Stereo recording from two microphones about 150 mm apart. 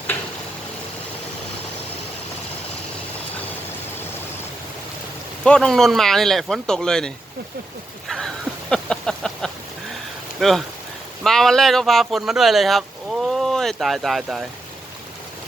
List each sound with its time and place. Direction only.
5.5 s speech: 5° left (ahead or behind)
8.7 s a sound: 5° left (ahead or behind)
10.4 s speech: centre (ahead or behind)